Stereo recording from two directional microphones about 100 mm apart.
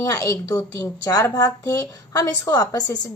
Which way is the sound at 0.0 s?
35° left (ahead or behind).